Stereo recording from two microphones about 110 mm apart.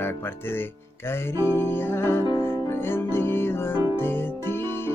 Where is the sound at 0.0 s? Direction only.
20° left (ahead or behind).